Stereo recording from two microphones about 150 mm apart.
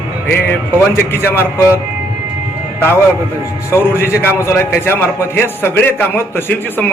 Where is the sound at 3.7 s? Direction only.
15° left (ahead or behind).